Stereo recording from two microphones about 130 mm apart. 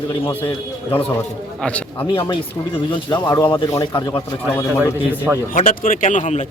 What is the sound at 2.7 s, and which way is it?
Speech, 40° left (ahead or behind).